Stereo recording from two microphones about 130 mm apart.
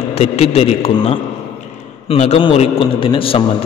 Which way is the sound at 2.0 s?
55° left (ahead or behind).